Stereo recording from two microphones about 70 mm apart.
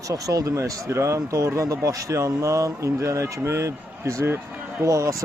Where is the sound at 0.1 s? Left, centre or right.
Right.